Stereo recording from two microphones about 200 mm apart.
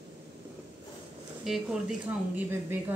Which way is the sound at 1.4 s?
Centre (ahead or behind).